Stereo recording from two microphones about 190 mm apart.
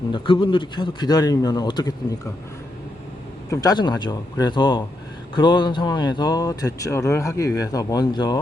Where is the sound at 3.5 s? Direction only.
20° left (ahead or behind).